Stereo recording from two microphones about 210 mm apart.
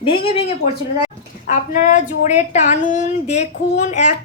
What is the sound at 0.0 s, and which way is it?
A child's voice, 25° left (ahead or behind).